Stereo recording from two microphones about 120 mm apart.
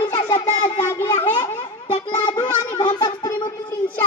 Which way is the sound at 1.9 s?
40° left (ahead or behind).